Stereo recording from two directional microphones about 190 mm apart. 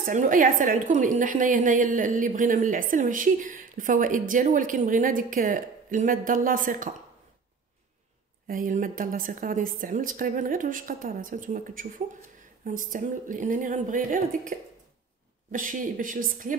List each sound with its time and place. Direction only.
0.0 s a woman's voice: 45° right (ahead or behind)
8.5 s a woman's voice: 45° right (ahead or behind)